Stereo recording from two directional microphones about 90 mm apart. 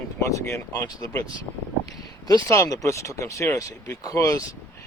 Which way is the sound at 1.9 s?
45° left (ahead or behind).